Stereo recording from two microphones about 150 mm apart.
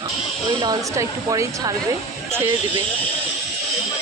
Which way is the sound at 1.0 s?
20° right (ahead or behind).